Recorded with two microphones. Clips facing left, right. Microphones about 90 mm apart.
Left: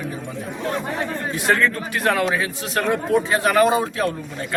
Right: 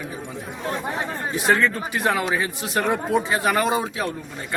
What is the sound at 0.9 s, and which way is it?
Speech, 20° right (ahead or behind).